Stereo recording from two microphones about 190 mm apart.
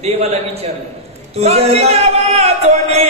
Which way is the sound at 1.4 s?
35° right (ahead or behind).